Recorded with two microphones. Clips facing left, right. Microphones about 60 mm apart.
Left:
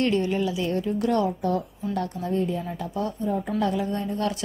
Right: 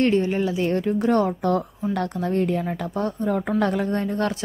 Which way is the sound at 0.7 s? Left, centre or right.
Right.